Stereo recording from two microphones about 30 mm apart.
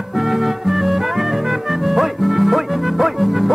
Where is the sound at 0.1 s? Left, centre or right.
Centre.